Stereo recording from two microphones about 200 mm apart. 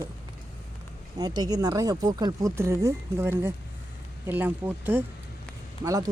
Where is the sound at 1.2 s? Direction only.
20° right (ahead or behind).